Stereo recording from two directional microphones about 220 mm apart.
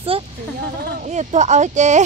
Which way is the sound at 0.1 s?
25° right (ahead or behind).